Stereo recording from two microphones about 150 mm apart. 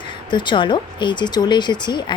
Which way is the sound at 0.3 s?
30° left (ahead or behind).